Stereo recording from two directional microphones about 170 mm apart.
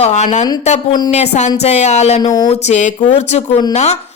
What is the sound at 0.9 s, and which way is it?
Speech, 25° left (ahead or behind).